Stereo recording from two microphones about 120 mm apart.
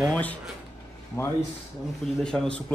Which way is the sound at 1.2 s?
25° left (ahead or behind).